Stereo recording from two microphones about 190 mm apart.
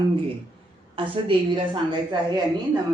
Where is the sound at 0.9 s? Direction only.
25° right (ahead or behind).